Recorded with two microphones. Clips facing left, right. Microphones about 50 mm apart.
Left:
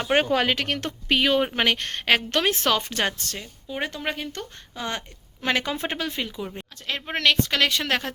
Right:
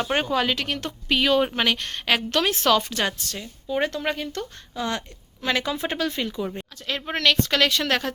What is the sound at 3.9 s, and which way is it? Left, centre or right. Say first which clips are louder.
Speech: right 3 dB; centre.